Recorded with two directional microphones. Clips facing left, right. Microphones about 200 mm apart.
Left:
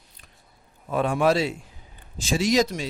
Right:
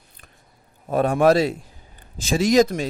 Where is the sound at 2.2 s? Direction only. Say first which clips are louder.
Right 5 dB; 50° right (ahead or behind).